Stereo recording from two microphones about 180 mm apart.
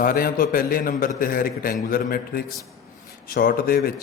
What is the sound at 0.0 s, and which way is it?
A man's voice, 55° left (ahead or behind).